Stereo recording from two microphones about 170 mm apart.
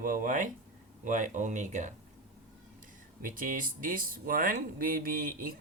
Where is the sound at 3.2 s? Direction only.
55° right (ahead or behind).